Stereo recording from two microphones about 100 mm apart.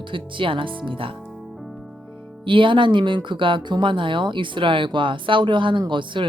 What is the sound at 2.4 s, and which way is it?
Speech, 55° right (ahead or behind).